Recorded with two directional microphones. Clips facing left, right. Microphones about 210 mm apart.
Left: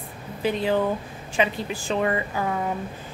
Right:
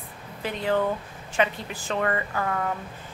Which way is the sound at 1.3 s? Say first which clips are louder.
Left 2 dB; 15° left (ahead or behind).